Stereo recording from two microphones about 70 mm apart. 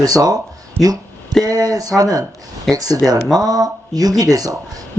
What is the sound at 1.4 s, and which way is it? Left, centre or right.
Speech, right.